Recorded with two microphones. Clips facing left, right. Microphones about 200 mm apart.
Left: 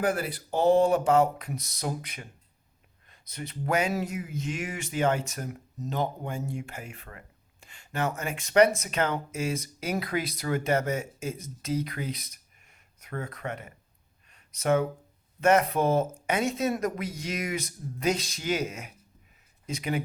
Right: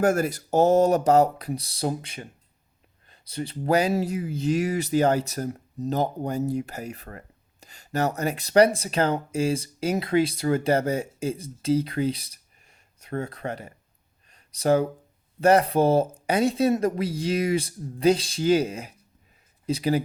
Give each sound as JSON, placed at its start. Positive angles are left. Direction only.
{"t": 0.0, "sound": "speech", "side_deg": -45}
{"t": 14.3, "sound": "a sound", "side_deg": -35}
{"t": 15.4, "sound": "speech", "side_deg": -35}